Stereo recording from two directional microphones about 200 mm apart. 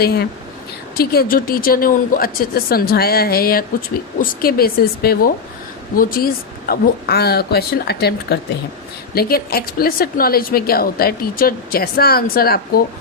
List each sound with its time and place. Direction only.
0.0 s a woman's voice: 50° left (ahead or behind)